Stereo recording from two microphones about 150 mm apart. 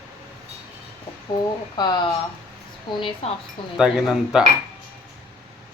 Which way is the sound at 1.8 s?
25° left (ahead or behind).